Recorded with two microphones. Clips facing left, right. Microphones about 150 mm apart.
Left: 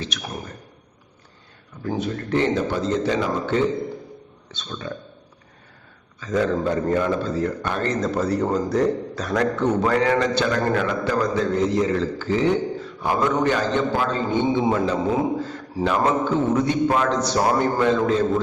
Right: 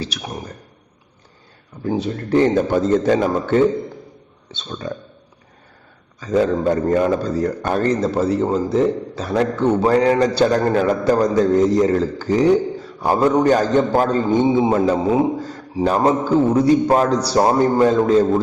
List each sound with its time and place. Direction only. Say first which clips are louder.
0.1 s a man's voice: right 2 dB; 35° right (ahead or behind)
1.8 s a man's voice: right 4 dB; 30° right (ahead or behind); by 3.6 s 45° right (ahead or behind)
4.5 s a man's voice: right 4 dB; 35° right (ahead or behind)
6.1 s a man's voice: right 4 dB; 35° right (ahead or behind)